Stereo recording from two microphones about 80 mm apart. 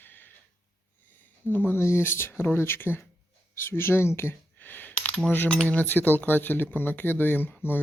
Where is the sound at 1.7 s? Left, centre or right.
Left.